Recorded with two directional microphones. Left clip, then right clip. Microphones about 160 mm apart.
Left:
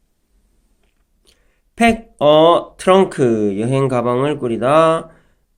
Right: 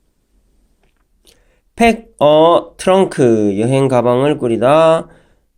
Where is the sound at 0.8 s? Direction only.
30° right (ahead or behind).